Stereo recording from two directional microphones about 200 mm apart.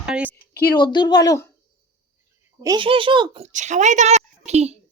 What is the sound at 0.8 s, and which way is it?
Speech, 20° left (ahead or behind).